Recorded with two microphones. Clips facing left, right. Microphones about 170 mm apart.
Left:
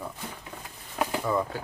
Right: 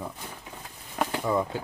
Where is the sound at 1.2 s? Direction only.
20° right (ahead or behind).